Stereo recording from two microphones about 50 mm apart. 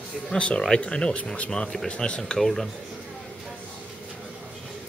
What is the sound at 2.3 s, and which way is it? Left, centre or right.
Speech, centre.